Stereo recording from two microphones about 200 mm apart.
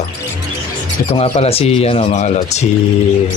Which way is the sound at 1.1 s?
30° left (ahead or behind).